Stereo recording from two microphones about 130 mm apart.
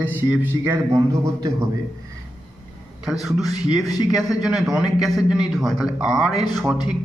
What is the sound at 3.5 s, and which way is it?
Speech, 30° left (ahead or behind).